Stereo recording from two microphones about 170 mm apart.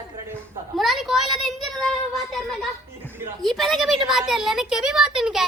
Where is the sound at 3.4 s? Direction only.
Centre (ahead or behind).